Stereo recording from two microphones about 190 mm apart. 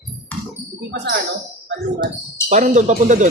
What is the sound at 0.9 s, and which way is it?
Speech, 65° right (ahead or behind).